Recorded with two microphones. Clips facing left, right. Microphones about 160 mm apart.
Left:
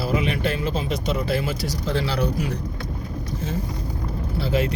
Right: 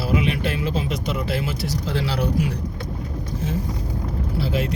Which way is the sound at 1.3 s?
5° right (ahead or behind).